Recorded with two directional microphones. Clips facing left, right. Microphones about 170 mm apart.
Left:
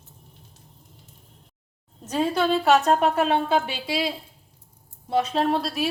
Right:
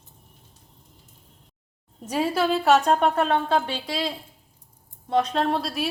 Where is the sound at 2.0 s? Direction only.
10° right (ahead or behind).